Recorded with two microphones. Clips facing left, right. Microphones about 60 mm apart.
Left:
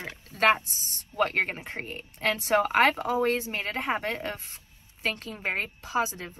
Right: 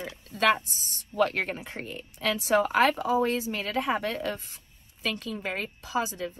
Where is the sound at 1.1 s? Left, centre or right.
Left.